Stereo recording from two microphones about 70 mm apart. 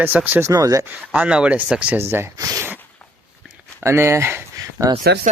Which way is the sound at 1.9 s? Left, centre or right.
Right.